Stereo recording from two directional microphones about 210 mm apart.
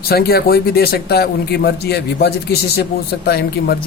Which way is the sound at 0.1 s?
45° left (ahead or behind).